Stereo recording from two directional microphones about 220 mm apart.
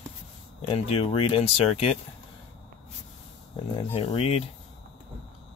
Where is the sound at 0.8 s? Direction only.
25° left (ahead or behind).